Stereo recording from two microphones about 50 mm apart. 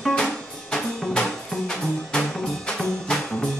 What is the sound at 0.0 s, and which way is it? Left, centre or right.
Music, centre.